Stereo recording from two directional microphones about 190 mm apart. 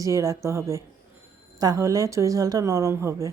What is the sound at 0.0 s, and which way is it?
A woman's voice, 15° right (ahead or behind).